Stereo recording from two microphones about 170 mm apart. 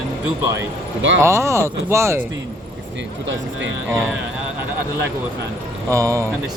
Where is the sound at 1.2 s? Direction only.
15° right (ahead or behind).